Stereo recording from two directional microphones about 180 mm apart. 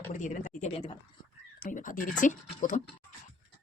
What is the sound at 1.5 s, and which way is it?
Speech, 50° left (ahead or behind).